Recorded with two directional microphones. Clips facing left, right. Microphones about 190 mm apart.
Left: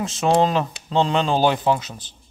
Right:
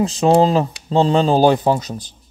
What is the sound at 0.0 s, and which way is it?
Speech, 35° right (ahead or behind).